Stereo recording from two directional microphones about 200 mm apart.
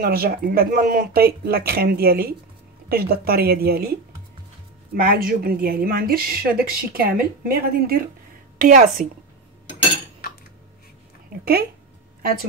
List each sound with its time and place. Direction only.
0.0 s a woman's voice: 50° right (ahead or behind)
4.9 s a woman's voice: 45° right (ahead or behind)
12.2 s speech: 50° right (ahead or behind)